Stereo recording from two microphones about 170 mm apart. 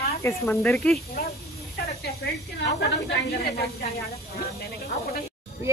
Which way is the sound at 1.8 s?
65° left (ahead or behind).